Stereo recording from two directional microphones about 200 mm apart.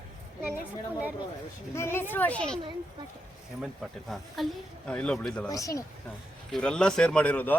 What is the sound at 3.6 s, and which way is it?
Speech, centre (ahead or behind).